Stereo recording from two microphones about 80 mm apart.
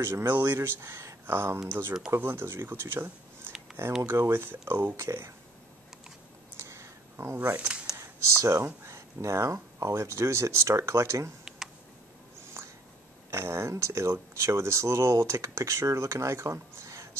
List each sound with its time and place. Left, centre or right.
0.0 s speech: right
6.5 s a sound: right
7.5 s speech: centre
7.9 s speech: right
13.3 s speech: right